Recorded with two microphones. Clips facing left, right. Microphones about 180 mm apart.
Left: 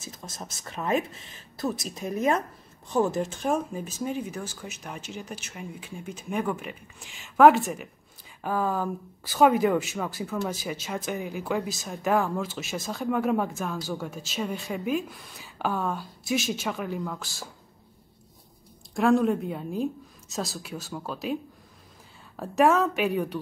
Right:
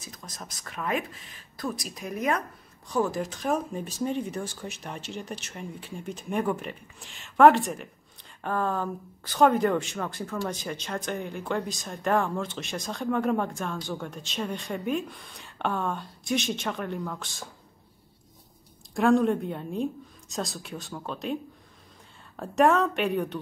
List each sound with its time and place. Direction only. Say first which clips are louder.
0.0 s speech: left 3 dB; 25° left (ahead or behind)
3.4 s speech: right 1 dB; 5° left (ahead or behind)
18.9 s speech: even; centre (ahead or behind)
22.4 s speech: even; centre (ahead or behind)